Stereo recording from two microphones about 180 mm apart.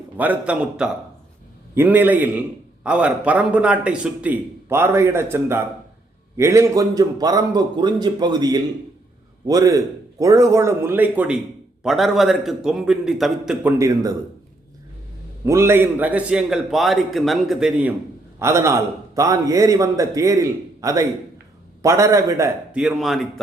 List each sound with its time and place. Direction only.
0.2 s a man's voice: 10° right (ahead or behind)
15.4 s a man's voice: 15° right (ahead or behind)
18.3 s a man's voice: 15° right (ahead or behind)
22.7 s a man's voice: 5° right (ahead or behind)